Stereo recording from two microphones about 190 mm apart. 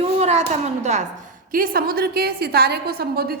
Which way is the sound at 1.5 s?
50° right (ahead or behind).